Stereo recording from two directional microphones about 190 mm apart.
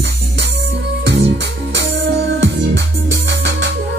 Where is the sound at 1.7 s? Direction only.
70° right (ahead or behind).